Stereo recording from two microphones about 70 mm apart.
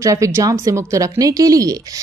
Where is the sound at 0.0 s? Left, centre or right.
Right.